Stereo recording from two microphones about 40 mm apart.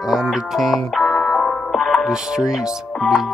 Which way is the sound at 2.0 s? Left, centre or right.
Centre.